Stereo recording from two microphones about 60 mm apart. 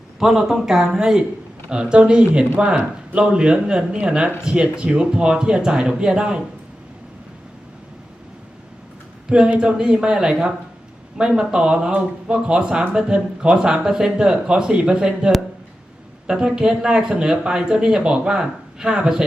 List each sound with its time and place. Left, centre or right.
0.2 s speech: centre
9.3 s speech: centre